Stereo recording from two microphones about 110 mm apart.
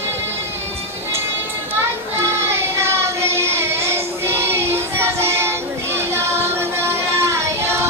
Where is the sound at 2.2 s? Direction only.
25° right (ahead or behind).